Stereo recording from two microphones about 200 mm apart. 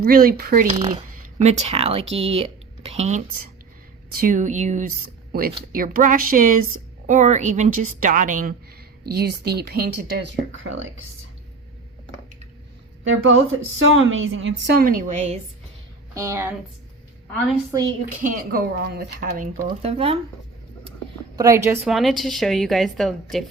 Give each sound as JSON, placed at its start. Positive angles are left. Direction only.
{"t": 0.0, "sound": "speech", "side_deg": -45}
{"t": 0.9, "sound": "a woman's voice", "side_deg": -35}
{"t": 9.0, "sound": "speech", "side_deg": -50}
{"t": 10.5, "sound": "a woman's voice", "side_deg": -75}
{"t": 13.1, "sound": "a woman's voice", "side_deg": -80}
{"t": 14.8, "sound": "a woman's voice", "side_deg": -45}
{"t": 16.1, "sound": "a woman's voice", "side_deg": -15}
{"t": 17.7, "sound": "speech", "side_deg": -20}
{"t": 18.2, "sound": "speech", "side_deg": -45}
{"t": 19.8, "sound": "speech", "side_deg": -30}
{"t": 21.3, "sound": "a woman's voice", "side_deg": -15}
{"t": 21.8, "sound": "a woman's voice", "side_deg": 0}